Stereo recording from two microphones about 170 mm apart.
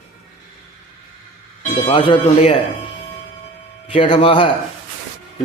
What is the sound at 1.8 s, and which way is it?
Speech, 30° left (ahead or behind).